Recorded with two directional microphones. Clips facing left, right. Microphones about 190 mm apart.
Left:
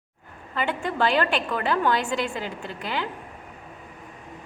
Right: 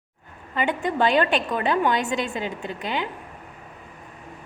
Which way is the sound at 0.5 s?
20° right (ahead or behind).